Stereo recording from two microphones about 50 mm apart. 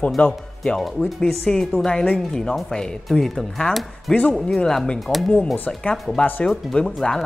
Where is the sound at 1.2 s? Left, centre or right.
Centre.